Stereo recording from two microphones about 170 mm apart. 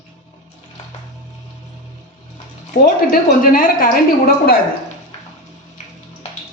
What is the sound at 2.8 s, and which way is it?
A woman's voice, 60° left (ahead or behind).